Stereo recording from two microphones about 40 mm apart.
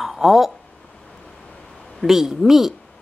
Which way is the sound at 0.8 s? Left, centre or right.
Left.